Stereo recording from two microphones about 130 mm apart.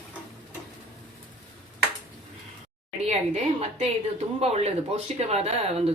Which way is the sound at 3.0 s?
60° right (ahead or behind).